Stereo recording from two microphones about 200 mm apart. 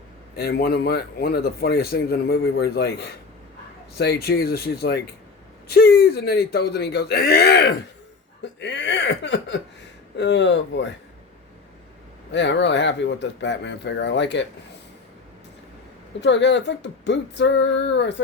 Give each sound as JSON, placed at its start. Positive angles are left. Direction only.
{"t": 0.3, "sound": "speech", "side_deg": 50}
{"t": 12.3, "sound": "speech", "side_deg": 60}
{"t": 16.2, "sound": "speech", "side_deg": 60}